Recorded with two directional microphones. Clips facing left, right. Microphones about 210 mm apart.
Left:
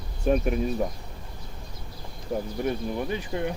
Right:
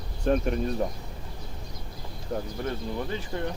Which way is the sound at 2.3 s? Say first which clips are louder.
Left 3 dB; 15° left (ahead or behind).